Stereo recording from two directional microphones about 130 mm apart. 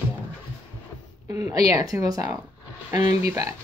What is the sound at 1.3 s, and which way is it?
Speech, 30° right (ahead or behind).